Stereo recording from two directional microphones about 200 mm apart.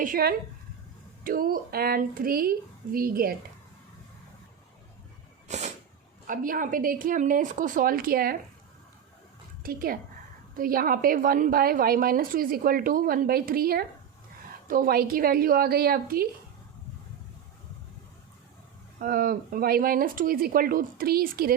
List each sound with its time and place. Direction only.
0.0 s a woman's voice: 45° right (ahead or behind)
5.5 s a sound: 35° right (ahead or behind)
6.2 s a woman's voice: 45° right (ahead or behind)
9.6 s a woman's voice: 45° right (ahead or behind)
18.9 s a woman's voice: 45° right (ahead or behind)